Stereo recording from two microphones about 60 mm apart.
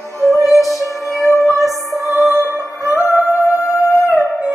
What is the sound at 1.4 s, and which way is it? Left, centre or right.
Music, centre.